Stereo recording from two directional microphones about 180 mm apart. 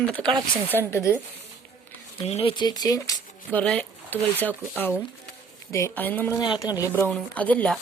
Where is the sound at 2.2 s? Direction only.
35° left (ahead or behind); by 6.4 s 10° left (ahead or behind).